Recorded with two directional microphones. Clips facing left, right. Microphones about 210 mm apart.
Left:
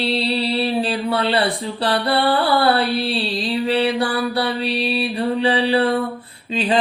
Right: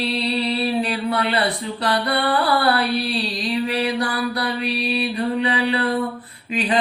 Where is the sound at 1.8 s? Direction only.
30° left (ahead or behind).